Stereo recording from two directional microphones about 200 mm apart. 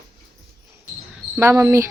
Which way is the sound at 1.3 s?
15° right (ahead or behind).